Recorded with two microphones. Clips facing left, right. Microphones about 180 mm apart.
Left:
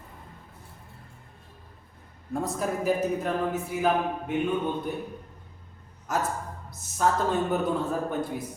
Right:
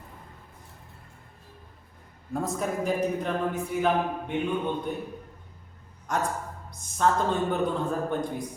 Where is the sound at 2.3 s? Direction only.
Centre (ahead or behind).